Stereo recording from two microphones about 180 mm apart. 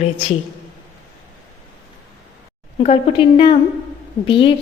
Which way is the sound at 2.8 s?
35° left (ahead or behind).